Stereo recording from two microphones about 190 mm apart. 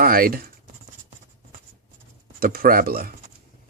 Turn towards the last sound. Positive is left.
turn(degrees=-50)  # may be behind; listen again after turning